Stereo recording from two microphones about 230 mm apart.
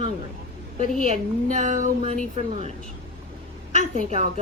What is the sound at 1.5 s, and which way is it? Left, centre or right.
Speech, right.